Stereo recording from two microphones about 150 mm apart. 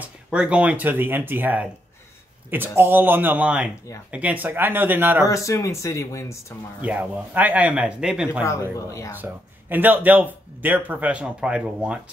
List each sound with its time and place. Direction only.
0.0 s a man's voice: 5° right (ahead or behind)
5.2 s speech: 20° left (ahead or behind)
6.8 s a man's voice: 10° right (ahead or behind)
8.7 s speech: 20° left (ahead or behind)
9.1 s a man's voice: 10° right (ahead or behind)